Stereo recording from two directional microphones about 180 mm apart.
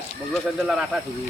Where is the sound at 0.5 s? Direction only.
5° right (ahead or behind).